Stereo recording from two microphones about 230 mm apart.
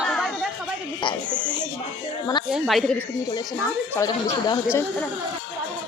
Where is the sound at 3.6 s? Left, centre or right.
Centre.